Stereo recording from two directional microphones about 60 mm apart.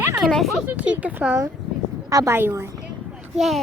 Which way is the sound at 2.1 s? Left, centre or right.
Right.